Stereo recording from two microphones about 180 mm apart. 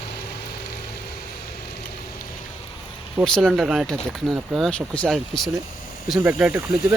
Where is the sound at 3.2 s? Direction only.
Centre (ahead or behind).